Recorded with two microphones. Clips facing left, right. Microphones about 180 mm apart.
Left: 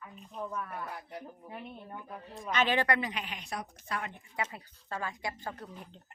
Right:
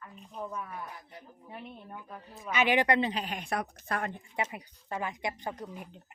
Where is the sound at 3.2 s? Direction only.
50° right (ahead or behind).